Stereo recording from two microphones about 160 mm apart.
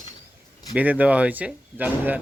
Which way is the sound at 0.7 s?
10° right (ahead or behind).